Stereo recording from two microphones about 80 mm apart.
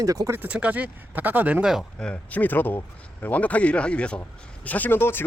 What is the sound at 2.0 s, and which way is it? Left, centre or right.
Speech, centre.